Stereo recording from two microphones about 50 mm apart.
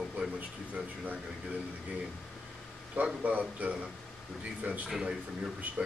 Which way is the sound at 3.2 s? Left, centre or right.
Right.